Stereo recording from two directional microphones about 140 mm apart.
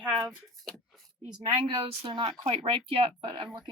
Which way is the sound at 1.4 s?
40° right (ahead or behind).